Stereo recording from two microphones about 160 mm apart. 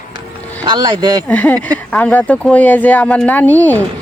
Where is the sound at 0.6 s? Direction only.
30° right (ahead or behind).